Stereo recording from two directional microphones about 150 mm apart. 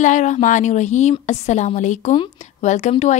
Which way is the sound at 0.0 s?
55° left (ahead or behind).